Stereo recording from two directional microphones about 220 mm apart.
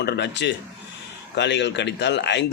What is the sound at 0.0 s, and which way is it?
Speech, 50° left (ahead or behind).